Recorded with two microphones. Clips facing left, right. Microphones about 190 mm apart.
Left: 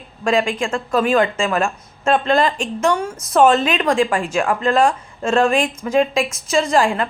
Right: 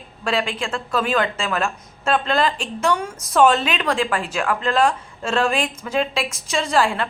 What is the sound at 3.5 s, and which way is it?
A woman's voice, 45° left (ahead or behind).